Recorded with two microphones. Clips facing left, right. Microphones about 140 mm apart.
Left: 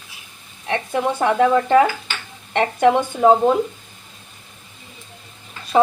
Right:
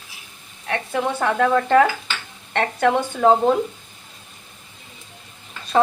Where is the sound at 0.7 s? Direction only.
15° left (ahead or behind).